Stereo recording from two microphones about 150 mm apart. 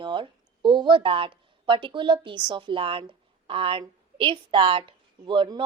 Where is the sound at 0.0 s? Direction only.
30° right (ahead or behind).